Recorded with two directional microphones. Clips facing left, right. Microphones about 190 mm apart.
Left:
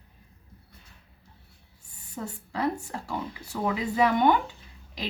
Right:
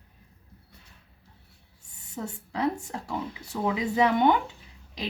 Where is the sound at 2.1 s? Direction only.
20° right (ahead or behind).